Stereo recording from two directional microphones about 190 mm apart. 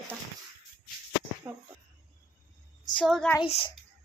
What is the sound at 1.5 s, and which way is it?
Speech, 15° right (ahead or behind).